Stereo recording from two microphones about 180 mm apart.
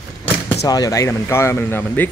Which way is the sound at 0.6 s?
20° left (ahead or behind).